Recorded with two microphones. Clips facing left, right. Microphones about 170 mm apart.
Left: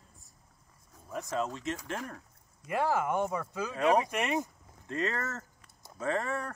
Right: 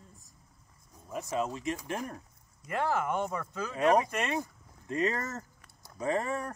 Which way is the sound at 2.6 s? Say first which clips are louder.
Left 1 dB; 10° left (ahead or behind).